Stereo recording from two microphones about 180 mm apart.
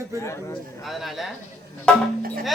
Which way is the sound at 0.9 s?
Centre (ahead or behind).